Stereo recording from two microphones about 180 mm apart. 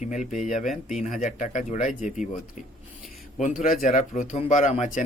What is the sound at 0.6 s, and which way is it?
Speech, centre (ahead or behind).